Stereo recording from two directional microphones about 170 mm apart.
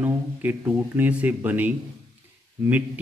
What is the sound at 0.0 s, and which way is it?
Speech, 10° right (ahead or behind).